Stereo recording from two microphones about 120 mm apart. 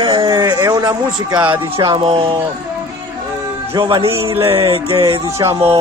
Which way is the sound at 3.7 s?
40° right (ahead or behind).